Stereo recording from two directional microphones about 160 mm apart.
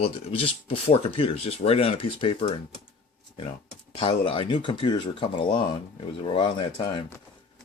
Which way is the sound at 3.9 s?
35° left (ahead or behind).